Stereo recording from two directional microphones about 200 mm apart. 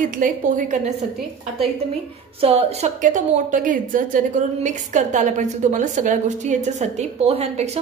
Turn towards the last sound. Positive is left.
turn(degrees=-30)  # may be behind; listen again after turning